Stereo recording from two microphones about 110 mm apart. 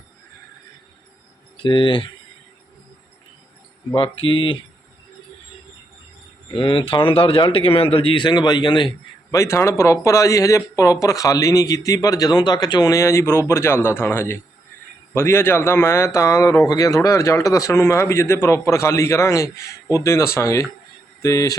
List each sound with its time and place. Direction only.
1.6 s a man's voice: 45° left (ahead or behind)
3.9 s a man's voice: 55° left (ahead or behind)
6.5 s a man's voice: 50° left (ahead or behind)
9.3 s a man's voice: 25° left (ahead or behind)